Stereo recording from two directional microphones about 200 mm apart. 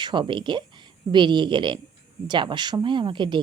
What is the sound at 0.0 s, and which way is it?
Speech, 25° right (ahead or behind).